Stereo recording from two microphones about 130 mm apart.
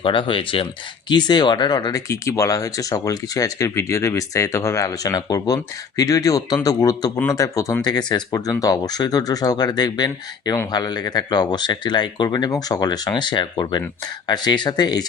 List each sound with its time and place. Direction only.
0.0 s speech: 40° left (ahead or behind)